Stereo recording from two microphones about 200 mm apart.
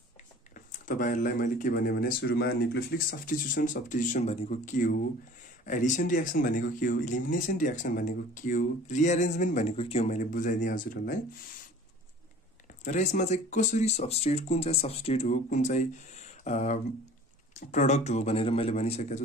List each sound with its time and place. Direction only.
0.7 s speech: 40° left (ahead or behind)
12.8 s speech: 35° left (ahead or behind)